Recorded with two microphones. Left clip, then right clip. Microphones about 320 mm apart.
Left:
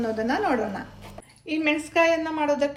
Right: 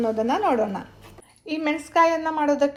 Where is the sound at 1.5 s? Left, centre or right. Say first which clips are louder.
Left 1 dB; centre.